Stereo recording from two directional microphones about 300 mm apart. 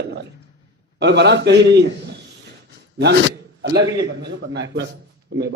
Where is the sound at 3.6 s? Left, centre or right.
Right.